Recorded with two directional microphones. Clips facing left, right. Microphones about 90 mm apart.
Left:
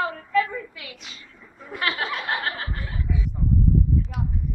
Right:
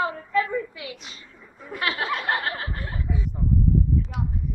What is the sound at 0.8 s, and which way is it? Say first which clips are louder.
Speech: right 4 dB; 20° right (ahead or behind).